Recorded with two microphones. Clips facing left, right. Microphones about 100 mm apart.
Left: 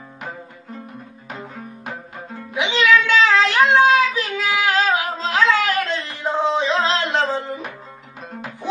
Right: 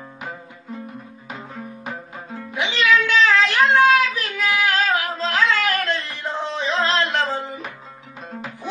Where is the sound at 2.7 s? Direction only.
20° left (ahead or behind).